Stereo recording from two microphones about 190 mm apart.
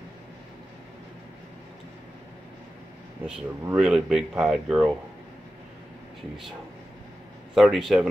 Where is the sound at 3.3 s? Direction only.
5° right (ahead or behind).